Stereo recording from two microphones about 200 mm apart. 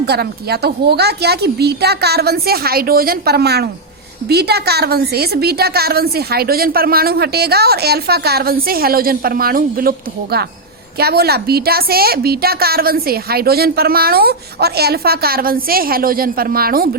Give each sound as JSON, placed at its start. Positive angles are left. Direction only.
{"t": 0.0, "sound": "a woman's voice", "side_deg": -55}